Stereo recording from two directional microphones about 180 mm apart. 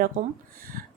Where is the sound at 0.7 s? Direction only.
50° right (ahead or behind).